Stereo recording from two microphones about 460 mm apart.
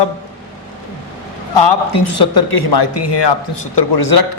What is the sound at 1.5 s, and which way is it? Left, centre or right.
A man's voice, left.